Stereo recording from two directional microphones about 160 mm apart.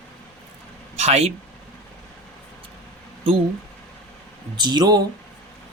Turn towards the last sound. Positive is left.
turn(degrees=-25)  # may be behind; listen again after turning